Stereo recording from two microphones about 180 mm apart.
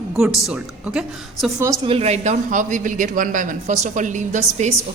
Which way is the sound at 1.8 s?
35° right (ahead or behind).